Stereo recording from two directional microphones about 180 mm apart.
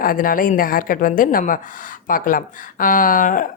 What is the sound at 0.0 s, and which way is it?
Speech, 50° left (ahead or behind).